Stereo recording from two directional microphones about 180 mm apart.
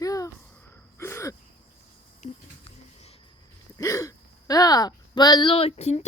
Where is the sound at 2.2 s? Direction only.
35° left (ahead or behind).